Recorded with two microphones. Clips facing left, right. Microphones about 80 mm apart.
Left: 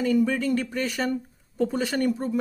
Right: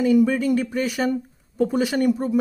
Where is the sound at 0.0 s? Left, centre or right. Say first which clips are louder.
Right 5 dB; centre.